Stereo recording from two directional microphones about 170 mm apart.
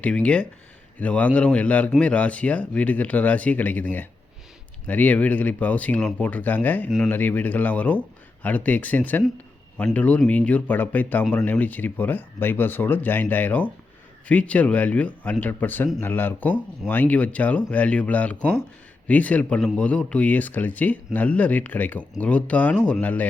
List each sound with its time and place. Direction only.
0.0 s speech: 5° left (ahead or behind)